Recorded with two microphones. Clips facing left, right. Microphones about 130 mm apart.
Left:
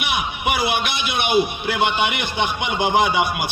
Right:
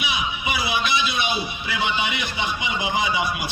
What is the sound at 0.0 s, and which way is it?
A man's voice, 60° left (ahead or behind).